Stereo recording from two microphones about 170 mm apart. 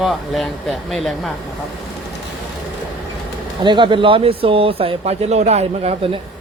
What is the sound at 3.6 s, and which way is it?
Speech, 30° right (ahead or behind).